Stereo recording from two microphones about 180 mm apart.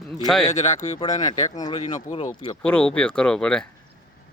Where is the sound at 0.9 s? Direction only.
20° left (ahead or behind).